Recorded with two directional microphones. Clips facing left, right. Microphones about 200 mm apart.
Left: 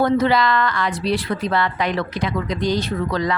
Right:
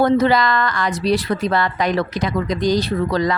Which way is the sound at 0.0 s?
40° right (ahead or behind).